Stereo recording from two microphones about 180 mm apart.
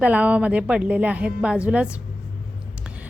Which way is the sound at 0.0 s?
5° right (ahead or behind).